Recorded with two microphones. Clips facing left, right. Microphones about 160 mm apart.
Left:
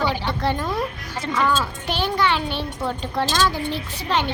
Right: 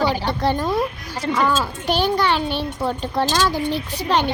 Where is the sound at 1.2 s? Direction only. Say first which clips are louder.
Right 2 dB; 35° right (ahead or behind).